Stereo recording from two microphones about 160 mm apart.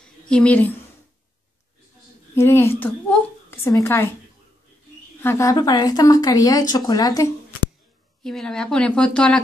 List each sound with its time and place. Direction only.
0.0 s a woman's voice: 5° left (ahead or behind)
2.3 s a woman's voice: 15° left (ahead or behind)
5.2 s a woman's voice: 15° left (ahead or behind)
8.2 s a woman's voice: 5° left (ahead or behind)